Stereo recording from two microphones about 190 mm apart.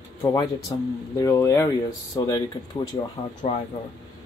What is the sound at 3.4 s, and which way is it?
Speech, 35° left (ahead or behind).